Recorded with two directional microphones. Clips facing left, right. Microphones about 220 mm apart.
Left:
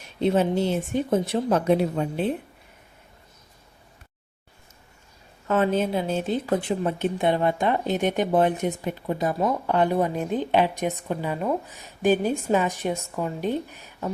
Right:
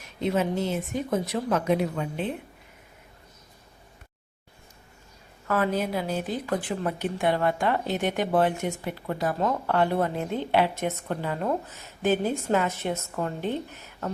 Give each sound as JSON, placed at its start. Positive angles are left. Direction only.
{"t": 0.0, "sound": "speech", "side_deg": 30}
{"t": 5.5, "sound": "a woman's voice", "side_deg": 25}
{"t": 9.4, "sound": "a woman's voice", "side_deg": 10}